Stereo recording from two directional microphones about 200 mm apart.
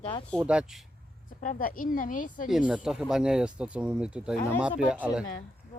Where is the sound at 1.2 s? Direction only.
40° left (ahead or behind).